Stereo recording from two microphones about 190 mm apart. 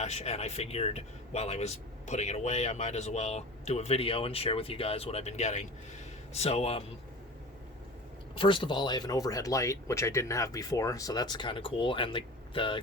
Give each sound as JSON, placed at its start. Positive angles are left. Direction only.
{"t": 0.0, "sound": "a man's voice", "side_deg": 35}
{"t": 8.4, "sound": "speech", "side_deg": 25}